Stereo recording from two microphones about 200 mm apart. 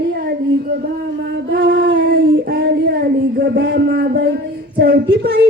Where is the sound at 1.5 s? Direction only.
55° right (ahead or behind).